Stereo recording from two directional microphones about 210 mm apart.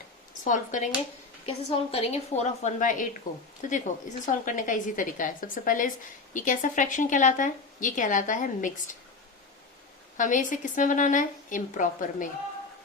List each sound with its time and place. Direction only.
0.4 s a woman's voice: 35° left (ahead or behind)
10.2 s a woman's voice: 40° left (ahead or behind)